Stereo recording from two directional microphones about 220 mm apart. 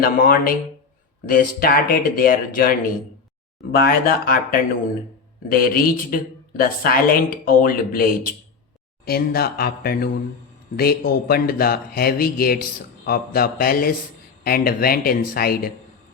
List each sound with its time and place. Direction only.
0.0 s speech: 40° left (ahead or behind)
9.0 s speech: 45° left (ahead or behind)